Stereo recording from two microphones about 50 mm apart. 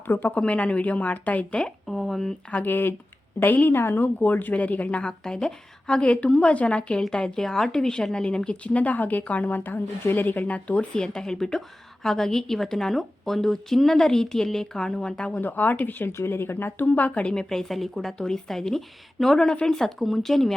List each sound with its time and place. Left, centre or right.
0.1 s a woman's voice: left
1.9 s a woman's voice: centre
2.6 s a woman's voice: left
5.2 s a woman's voice: centre
10.9 s a woman's voice: centre
15.4 s a woman's voice: left
16.1 s speech: left
17.3 s a woman's voice: centre